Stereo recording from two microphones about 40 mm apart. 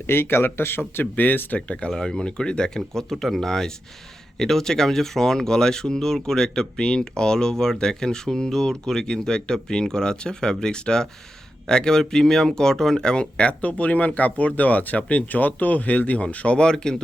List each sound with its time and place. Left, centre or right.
0.1 s speech: left
1.1 s speech: left
1.5 s speech: left
1.9 s speech: centre
2.1 s speech: left
3.1 s speech: centre; by 16.7 s left
16.7 s speech: centre